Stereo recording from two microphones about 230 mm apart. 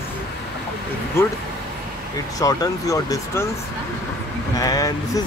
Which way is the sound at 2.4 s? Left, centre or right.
Centre.